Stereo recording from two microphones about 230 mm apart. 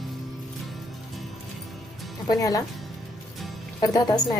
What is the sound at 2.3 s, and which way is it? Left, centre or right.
Speech, centre.